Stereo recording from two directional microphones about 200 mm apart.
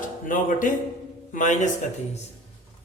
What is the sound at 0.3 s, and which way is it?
A woman's voice, 40° left (ahead or behind).